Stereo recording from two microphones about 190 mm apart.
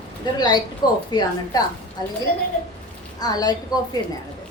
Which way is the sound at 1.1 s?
20° left (ahead or behind).